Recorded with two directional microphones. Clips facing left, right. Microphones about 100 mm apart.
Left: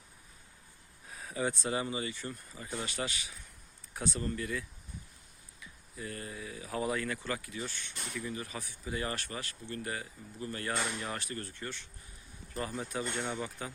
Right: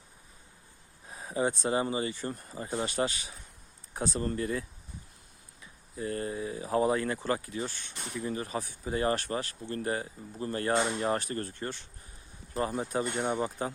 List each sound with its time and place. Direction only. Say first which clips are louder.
1.0 s speech: right 5 dB; 30° right (ahead or behind)
11.0 s speech: right 9 dB; 35° right (ahead or behind)
13.1 s speech: right 6 dB; 20° right (ahead or behind)